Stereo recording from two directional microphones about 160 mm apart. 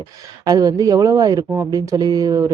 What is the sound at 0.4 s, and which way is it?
Speech, 20° right (ahead or behind).